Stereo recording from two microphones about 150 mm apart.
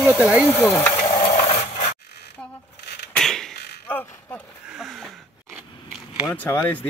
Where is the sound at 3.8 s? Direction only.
15° left (ahead or behind).